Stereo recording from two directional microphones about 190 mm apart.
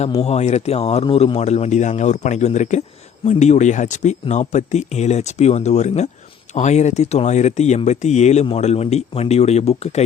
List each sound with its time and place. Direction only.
0.0 s speech: 30° left (ahead or behind)